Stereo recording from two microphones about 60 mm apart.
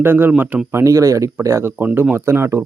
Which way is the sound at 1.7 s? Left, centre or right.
Right.